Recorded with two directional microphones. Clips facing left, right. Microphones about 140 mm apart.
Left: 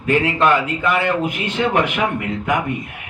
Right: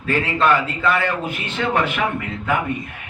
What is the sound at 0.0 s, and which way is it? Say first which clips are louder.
A man's voice: left 3 dB; 15° left (ahead or behind).